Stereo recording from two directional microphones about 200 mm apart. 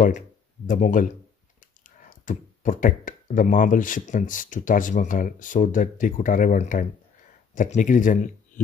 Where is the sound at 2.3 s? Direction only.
40° left (ahead or behind).